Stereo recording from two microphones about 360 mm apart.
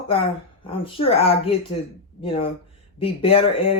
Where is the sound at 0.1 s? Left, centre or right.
Centre.